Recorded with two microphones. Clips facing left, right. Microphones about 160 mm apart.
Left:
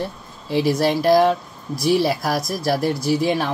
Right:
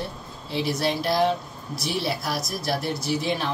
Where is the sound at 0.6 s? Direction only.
45° left (ahead or behind).